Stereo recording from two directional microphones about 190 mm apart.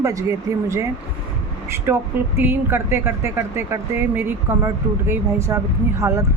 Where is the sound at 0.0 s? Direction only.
15° right (ahead or behind).